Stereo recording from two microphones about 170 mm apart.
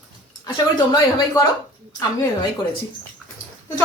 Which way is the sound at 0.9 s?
25° left (ahead or behind).